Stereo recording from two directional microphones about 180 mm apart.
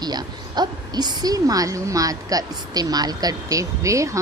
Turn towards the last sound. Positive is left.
turn(degrees=-15)  # may be behind; listen again after turning